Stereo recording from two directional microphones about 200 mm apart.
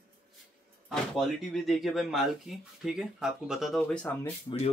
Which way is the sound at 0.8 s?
Centre (ahead or behind).